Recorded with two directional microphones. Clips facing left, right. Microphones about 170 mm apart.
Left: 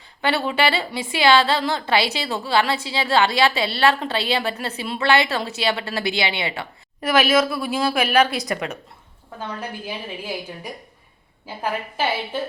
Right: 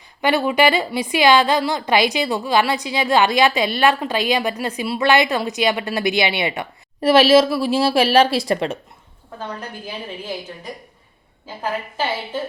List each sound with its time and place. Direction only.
0.2 s a woman's voice: 15° right (ahead or behind)
11.4 s a woman's voice: 10° left (ahead or behind)